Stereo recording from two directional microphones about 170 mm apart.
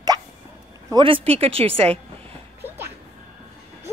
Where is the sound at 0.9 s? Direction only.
30° right (ahead or behind).